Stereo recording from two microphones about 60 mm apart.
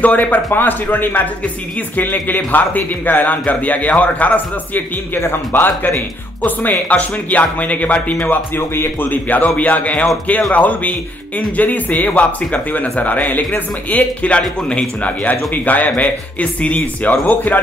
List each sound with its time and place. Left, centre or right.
0.0 s a man's voice: left
8.3 s speech: left
9.6 s a man's voice: left